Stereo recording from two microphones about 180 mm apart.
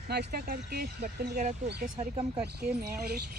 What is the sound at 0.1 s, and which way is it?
Speech, 60° right (ahead or behind).